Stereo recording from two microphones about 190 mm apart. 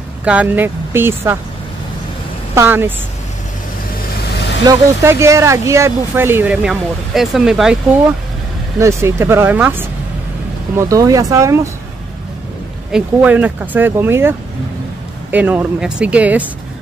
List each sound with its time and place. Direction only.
0.2 s speech: 5° right (ahead or behind)
2.5 s speech: 15° right (ahead or behind)
4.6 s speech: 15° right (ahead or behind)
8.7 s speech: 15° right (ahead or behind)
12.9 s speech: 10° right (ahead or behind)
15.3 s speech: 10° right (ahead or behind)